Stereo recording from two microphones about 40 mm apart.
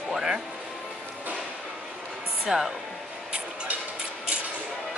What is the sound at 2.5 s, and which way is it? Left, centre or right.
Speech, centre.